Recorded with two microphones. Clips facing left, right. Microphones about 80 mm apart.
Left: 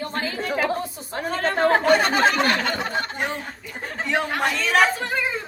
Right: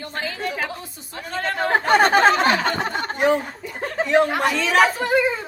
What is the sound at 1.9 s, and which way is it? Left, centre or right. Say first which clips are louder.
Speech: right 3 dB; right.